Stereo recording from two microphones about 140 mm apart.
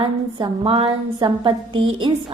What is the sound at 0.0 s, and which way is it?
Speech, 30° right (ahead or behind).